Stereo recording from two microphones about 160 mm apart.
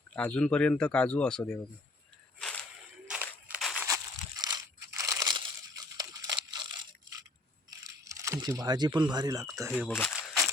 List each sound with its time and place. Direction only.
0.1 s speech: 10° left (ahead or behind)
3.1 s a sound: 5° right (ahead or behind)
3.8 s crushing: 20° right (ahead or behind)
7.7 s speech: 20° right (ahead or behind)
9.7 s camera: 10° left (ahead or behind)